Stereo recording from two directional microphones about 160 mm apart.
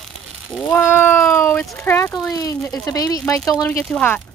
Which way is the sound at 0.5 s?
5° left (ahead or behind).